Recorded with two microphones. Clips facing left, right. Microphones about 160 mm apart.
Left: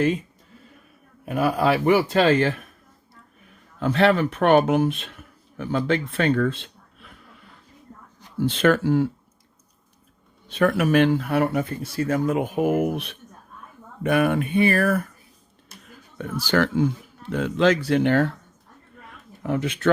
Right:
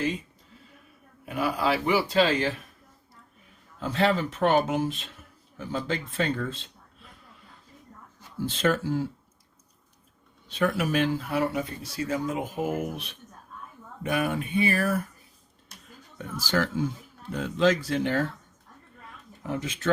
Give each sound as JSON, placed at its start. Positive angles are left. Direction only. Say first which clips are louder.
{"t": 1.2, "sound": "speech", "louder": "left 6 dB", "side_deg": 50}
{"t": 3.8, "sound": "speech", "louder": "left 6 dB", "side_deg": 65}
{"t": 10.5, "sound": "speech", "louder": "left 6 dB", "side_deg": 60}
{"t": 16.1, "sound": "speech", "louder": "left 5 dB", "side_deg": 65}
{"t": 19.4, "sound": "speech", "louder": "left 7 dB", "side_deg": 65}